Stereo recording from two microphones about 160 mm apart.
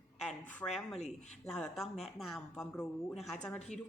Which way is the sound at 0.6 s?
15° left (ahead or behind).